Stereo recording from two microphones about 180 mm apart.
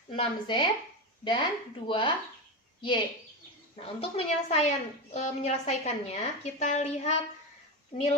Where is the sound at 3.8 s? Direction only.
35° left (ahead or behind).